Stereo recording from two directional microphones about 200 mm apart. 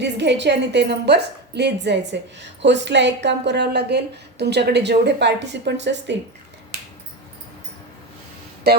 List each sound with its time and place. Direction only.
0.0 s a woman's voice: 60° right (ahead or behind)
8.7 s speech: 55° right (ahead or behind)